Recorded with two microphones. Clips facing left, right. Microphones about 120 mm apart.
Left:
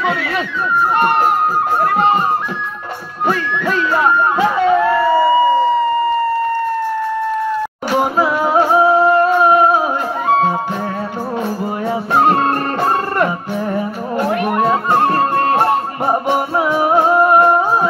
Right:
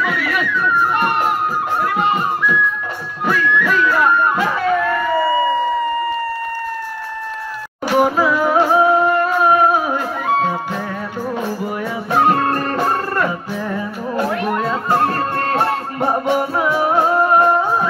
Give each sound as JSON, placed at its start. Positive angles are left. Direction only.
{"t": 0.0, "sound": "a sound", "side_deg": 25}
{"t": 1.8, "sound": "a sound", "side_deg": 35}
{"t": 8.0, "sound": "music", "side_deg": 25}
{"t": 12.2, "sound": "music", "side_deg": 30}
{"t": 14.7, "sound": "music", "side_deg": 20}
{"t": 17.2, "sound": "music", "side_deg": 10}